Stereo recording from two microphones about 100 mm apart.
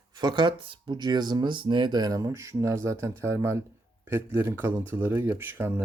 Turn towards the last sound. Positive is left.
turn(degrees=-25)  # may be behind; listen again after turning